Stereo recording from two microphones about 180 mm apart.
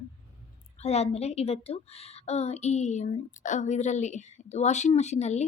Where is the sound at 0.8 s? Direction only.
35° left (ahead or behind).